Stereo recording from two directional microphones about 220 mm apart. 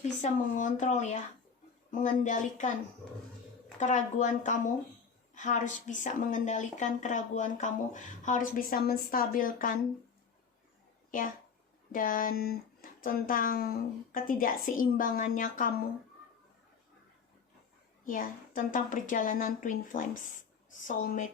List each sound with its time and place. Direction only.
0.2 s speech: 35° left (ahead or behind)
3.8 s speech: 35° left (ahead or behind)
11.9 s speech: 40° left (ahead or behind)
18.0 s speech: 40° left (ahead or behind)